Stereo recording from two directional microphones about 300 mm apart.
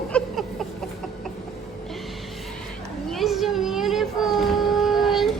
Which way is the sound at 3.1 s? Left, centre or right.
Centre.